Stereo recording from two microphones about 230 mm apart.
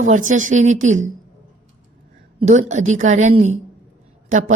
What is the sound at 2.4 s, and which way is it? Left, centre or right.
A woman's voice, right.